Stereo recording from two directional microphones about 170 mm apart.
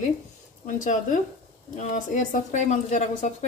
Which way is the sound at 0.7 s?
50° left (ahead or behind).